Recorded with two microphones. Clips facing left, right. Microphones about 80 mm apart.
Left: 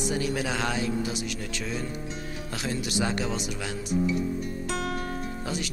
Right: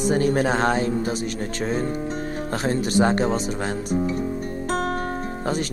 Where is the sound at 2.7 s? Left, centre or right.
Right.